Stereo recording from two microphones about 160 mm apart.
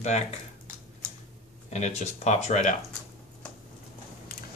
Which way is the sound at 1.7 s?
45° left (ahead or behind).